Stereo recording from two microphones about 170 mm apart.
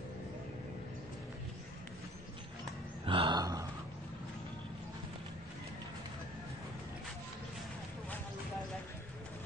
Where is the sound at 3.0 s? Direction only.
30° right (ahead or behind).